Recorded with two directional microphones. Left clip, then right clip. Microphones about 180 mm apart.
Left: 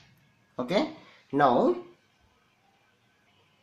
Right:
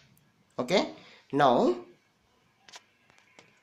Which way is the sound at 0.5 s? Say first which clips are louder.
Right 1 dB; 20° right (ahead or behind).